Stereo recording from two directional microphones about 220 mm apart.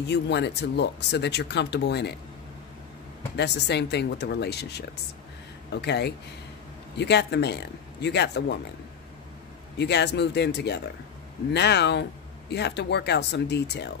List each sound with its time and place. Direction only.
0.0 s speech: 50° left (ahead or behind)
3.3 s speech: 50° left (ahead or behind)
9.8 s speech: 50° left (ahead or behind)